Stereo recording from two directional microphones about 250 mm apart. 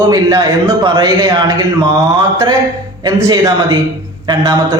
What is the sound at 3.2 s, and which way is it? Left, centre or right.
A man's voice, centre.